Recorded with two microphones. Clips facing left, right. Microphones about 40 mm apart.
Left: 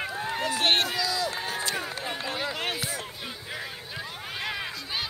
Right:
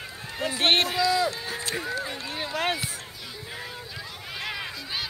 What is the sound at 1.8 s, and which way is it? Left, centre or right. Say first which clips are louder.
Speech: right 1 dB; left.